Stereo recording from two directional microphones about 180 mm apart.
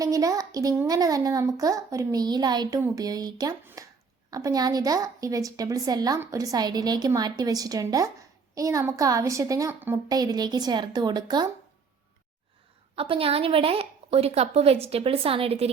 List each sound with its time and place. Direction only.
0.0 s a woman's voice: 20° right (ahead or behind)
13.0 s a woman's voice: 30° right (ahead or behind)